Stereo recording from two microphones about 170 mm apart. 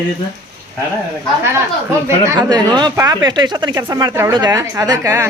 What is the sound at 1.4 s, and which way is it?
Speech, 15° right (ahead or behind).